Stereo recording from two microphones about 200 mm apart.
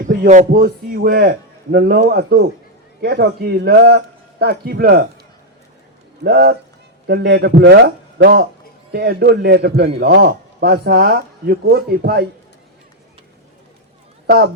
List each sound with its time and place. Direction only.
0.0 s a man's voice: 40° right (ahead or behind)
6.2 s a man's voice: 55° right (ahead or behind)
14.3 s speech: 55° right (ahead or behind)